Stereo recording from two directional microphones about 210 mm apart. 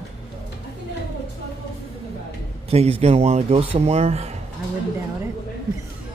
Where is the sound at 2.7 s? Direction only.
30° right (ahead or behind).